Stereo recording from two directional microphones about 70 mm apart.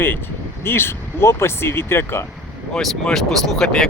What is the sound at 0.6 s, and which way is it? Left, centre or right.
Speech, left.